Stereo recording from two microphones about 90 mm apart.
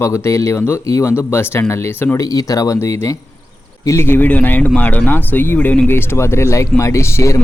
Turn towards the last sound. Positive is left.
turn(degrees=35)  # may be behind; listen again after turning